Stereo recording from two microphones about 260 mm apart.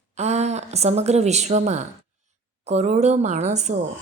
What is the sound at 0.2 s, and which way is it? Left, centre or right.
A woman's voice, right.